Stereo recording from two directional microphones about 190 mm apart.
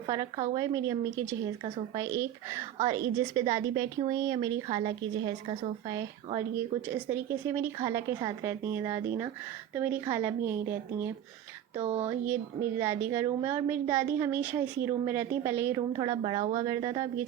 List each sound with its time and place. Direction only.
0.5 s a woman's voice: 20° right (ahead or behind)
11.8 s speech: 30° right (ahead or behind)
12.0 s a woman's voice: 10° right (ahead or behind)
16.0 s a woman's voice: 25° right (ahead or behind)